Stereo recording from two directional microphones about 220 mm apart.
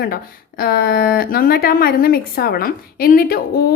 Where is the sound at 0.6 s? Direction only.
45° left (ahead or behind).